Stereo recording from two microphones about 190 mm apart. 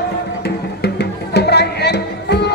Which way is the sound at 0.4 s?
60° left (ahead or behind).